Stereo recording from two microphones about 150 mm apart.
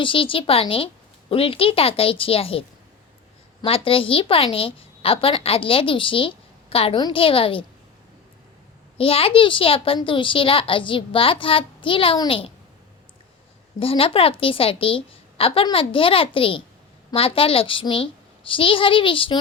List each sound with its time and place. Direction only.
0.0 s a child's voice: 35° left (ahead or behind)
9.0 s a child's voice: 40° left (ahead or behind)
13.7 s a child's voice: 40° left (ahead or behind)